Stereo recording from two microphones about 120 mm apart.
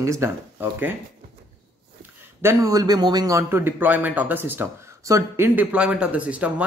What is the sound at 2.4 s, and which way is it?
Speech, 25° right (ahead or behind).